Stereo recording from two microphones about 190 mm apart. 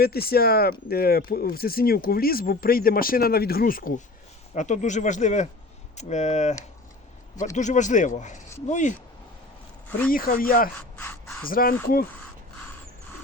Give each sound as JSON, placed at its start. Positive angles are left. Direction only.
{"t": 0.0, "sound": "speech", "side_deg": 55}
{"t": 10.1, "sound": "speech", "side_deg": 50}
{"t": 10.8, "sound": "speech", "side_deg": 10}
{"t": 11.4, "sound": "speech", "side_deg": 50}